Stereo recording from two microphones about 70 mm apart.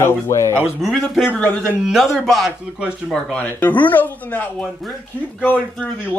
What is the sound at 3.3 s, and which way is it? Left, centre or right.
Speech, left.